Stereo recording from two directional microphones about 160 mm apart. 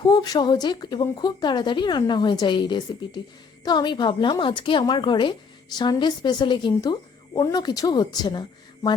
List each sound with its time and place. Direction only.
0.0 s a woman's voice: 25° left (ahead or behind)